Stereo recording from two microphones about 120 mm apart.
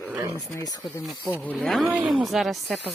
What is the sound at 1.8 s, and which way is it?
Speech, 10° right (ahead or behind).